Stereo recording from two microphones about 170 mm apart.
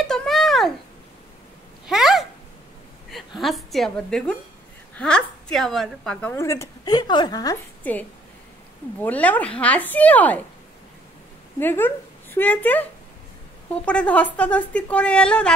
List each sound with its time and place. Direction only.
0.0 s a sound: 5° left (ahead or behind)
1.9 s a sound: centre (ahead or behind)
4.9 s a woman's voice: 5° left (ahead or behind)
6.3 s a woman's voice: 15° left (ahead or behind)
7.8 s a woman's voice: 10° left (ahead or behind)
9.0 s a woman's voice: 10° left (ahead or behind)
11.6 s speech: 10° left (ahead or behind)
13.8 s a woman's voice: 10° left (ahead or behind)